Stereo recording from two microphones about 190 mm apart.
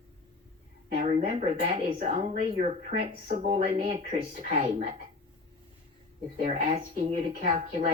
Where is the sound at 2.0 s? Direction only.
35° right (ahead or behind).